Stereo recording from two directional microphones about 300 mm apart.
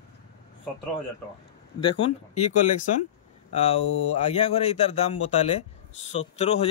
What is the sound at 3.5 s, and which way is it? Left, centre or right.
A man's voice, centre.